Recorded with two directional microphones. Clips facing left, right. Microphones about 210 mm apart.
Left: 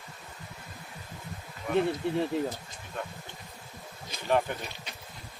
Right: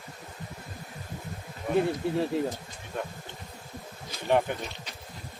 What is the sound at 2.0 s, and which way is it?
Speech, 5° right (ahead or behind).